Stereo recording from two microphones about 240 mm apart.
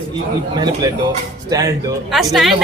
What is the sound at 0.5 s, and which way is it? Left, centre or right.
Speech, centre.